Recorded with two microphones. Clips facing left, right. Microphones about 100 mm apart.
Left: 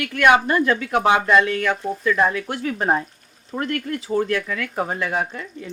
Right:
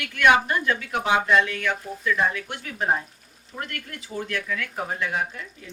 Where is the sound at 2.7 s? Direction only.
60° left (ahead or behind).